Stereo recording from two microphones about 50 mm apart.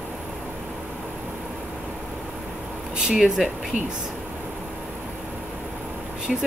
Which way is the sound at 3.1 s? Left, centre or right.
Centre.